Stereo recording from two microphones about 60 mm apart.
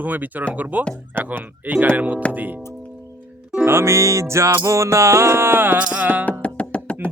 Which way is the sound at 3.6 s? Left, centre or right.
Right.